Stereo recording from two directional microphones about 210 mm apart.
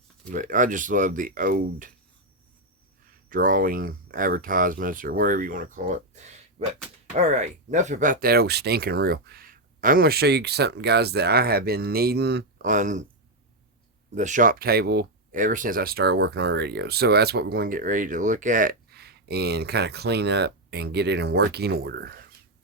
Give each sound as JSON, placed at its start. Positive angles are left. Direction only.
{"t": 0.3, "sound": "speech", "side_deg": -35}
{"t": 3.2, "sound": "speech", "side_deg": -40}
{"t": 14.2, "sound": "speech", "side_deg": -35}